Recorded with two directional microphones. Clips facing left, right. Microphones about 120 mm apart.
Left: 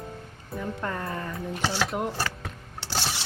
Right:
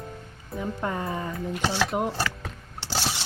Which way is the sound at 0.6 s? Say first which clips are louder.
Right 2 dB; 10° right (ahead or behind).